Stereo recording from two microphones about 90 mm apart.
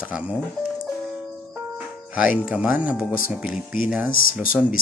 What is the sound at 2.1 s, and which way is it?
A man's voice, 15° right (ahead or behind).